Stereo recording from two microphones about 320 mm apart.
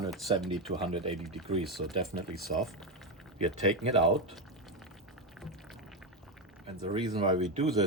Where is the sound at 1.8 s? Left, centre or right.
Centre.